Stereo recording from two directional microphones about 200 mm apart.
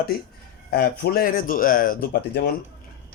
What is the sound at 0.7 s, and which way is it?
Speech, 50° left (ahead or behind).